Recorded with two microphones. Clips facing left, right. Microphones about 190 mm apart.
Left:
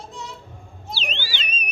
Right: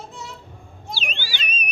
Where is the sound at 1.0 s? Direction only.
10° right (ahead or behind).